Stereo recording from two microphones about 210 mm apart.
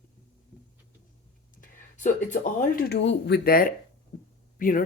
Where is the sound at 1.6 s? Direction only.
35° left (ahead or behind).